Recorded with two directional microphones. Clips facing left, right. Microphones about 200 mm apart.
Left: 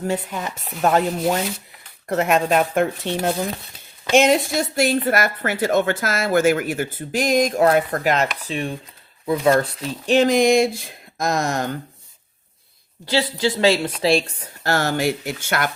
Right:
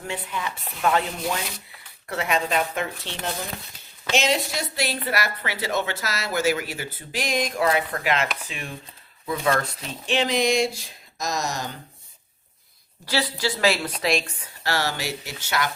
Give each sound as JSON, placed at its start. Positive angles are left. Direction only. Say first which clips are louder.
{"t": 0.1, "sound": "a woman's voice", "louder": "left 6 dB", "side_deg": 45}
{"t": 13.1, "sound": "a woman's voice", "louder": "left 5 dB", "side_deg": 25}